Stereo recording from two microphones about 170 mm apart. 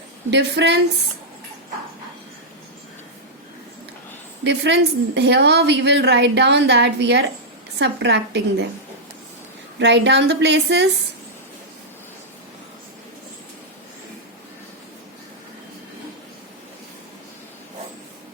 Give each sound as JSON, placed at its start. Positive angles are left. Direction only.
{"t": 0.3, "sound": "a woman's voice", "side_deg": -90}
{"t": 4.4, "sound": "a woman's voice", "side_deg": -90}
{"t": 9.7, "sound": "a woman's voice", "side_deg": -90}